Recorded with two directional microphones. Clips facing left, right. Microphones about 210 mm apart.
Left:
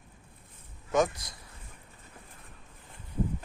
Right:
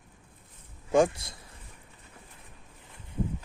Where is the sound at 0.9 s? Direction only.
30° right (ahead or behind).